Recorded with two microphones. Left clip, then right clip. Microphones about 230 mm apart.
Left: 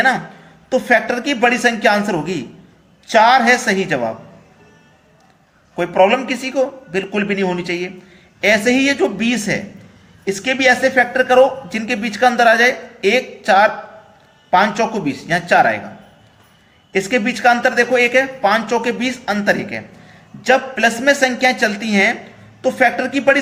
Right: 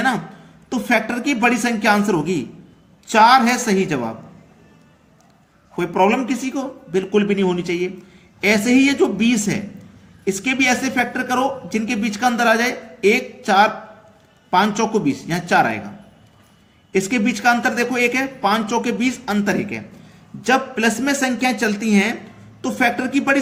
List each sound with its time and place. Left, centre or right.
0.7 s a man's voice: right
5.7 s a man's voice: right
16.9 s a man's voice: right